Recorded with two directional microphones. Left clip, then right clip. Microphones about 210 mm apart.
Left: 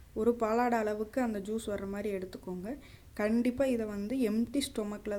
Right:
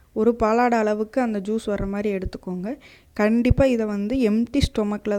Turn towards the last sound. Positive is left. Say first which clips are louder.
# right 12 dB
turn(degrees=-40)  # may be behind; listen again after turning